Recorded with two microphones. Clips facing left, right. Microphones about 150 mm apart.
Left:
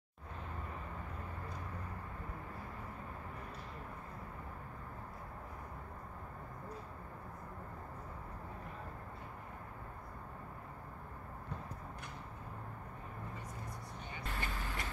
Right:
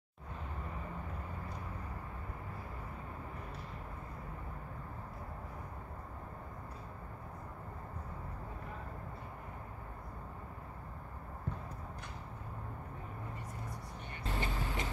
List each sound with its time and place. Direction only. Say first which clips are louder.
14.2 s vehicle: right 5 dB; 20° right (ahead or behind)